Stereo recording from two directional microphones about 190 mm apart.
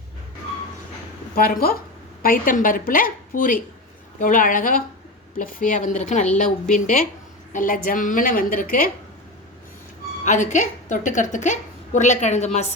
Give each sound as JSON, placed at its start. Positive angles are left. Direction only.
{"t": 1.4, "sound": "a woman's voice", "side_deg": 50}
{"t": 10.2, "sound": "a woman's voice", "side_deg": 40}